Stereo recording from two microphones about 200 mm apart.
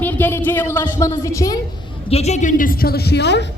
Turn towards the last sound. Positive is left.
turn(degrees=60)  # may be behind; listen again after turning